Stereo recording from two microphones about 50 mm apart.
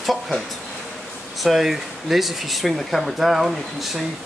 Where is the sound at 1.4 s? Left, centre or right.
Centre.